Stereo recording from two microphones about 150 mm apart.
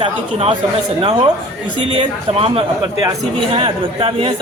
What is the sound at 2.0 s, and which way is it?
Speech, 35° right (ahead or behind).